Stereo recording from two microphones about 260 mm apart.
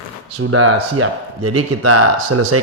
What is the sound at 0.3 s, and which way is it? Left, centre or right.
Speech, right.